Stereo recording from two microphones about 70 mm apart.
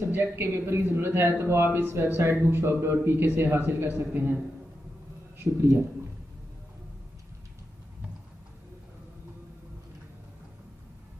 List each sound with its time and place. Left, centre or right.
0.1 s a man's voice: right
5.4 s a man's voice: right